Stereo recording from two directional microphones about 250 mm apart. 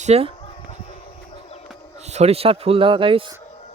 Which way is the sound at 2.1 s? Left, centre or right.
Right.